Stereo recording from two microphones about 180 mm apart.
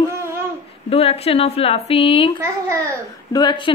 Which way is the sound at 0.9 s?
35° left (ahead or behind).